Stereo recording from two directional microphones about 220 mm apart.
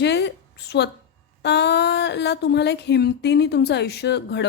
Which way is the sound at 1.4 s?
50° left (ahead or behind).